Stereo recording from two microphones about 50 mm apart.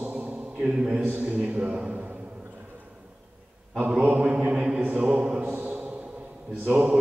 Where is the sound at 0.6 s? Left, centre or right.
Right.